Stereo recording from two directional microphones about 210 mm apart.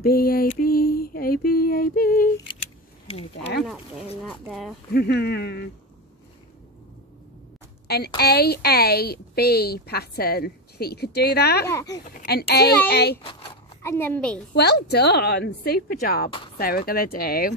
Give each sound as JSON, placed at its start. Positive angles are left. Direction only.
{"t": 0.0, "sound": "a sound", "side_deg": 45}
{"t": 4.3, "sound": "speech", "side_deg": 0}
{"t": 4.9, "sound": "a woman's voice", "side_deg": 50}
{"t": 8.2, "sound": "a woman's voice", "side_deg": 50}
{"t": 11.7, "sound": "a woman's voice", "side_deg": 15}
{"t": 12.2, "sound": "a woman's voice", "side_deg": 50}
{"t": 13.2, "sound": "speech", "side_deg": 25}
{"t": 13.8, "sound": "a woman's voice", "side_deg": 10}
{"t": 14.5, "sound": "a woman's voice", "side_deg": 50}